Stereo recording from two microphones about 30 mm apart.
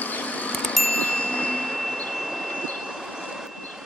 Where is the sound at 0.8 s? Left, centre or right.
Left.